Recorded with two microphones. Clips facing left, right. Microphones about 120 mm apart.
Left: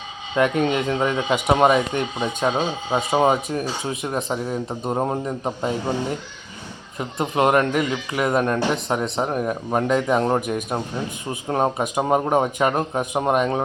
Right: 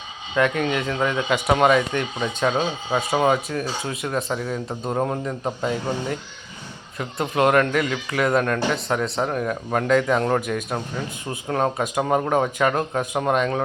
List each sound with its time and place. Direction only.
0.3 s a man's voice: 25° left (ahead or behind)